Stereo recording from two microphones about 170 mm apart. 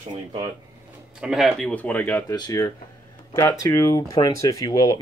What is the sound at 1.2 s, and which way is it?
Speech, centre (ahead or behind).